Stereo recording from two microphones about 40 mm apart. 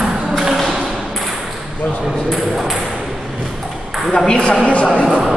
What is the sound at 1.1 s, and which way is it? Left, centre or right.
Ping, centre.